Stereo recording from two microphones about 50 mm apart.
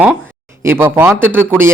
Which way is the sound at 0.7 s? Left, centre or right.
Right.